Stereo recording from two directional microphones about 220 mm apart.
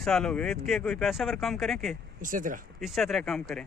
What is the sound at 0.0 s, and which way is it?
Speech, 5° left (ahead or behind).